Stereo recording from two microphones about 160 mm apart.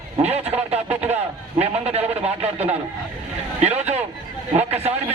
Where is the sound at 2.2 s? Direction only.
40° right (ahead or behind).